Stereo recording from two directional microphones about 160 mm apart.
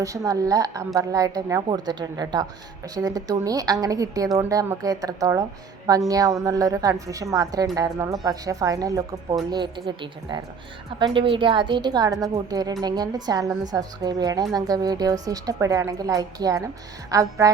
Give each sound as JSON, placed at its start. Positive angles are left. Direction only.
{"t": 0.0, "sound": "speech", "side_deg": -20}